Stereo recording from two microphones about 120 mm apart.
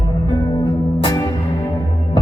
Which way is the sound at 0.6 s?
40° left (ahead or behind).